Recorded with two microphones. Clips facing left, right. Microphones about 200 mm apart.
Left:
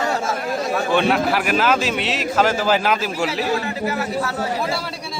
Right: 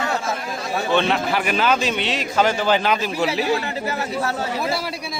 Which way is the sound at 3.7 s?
35° right (ahead or behind).